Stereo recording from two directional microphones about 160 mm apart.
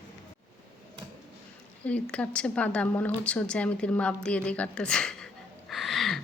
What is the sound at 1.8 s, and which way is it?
A woman's voice, 10° left (ahead or behind).